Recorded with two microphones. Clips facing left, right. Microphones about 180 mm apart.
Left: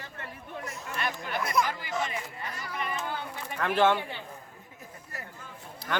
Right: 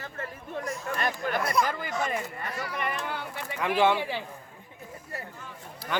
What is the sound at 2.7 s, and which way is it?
Speech, 65° right (ahead or behind).